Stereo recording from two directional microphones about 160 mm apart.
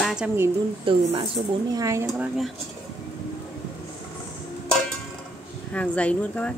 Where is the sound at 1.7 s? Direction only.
20° right (ahead or behind).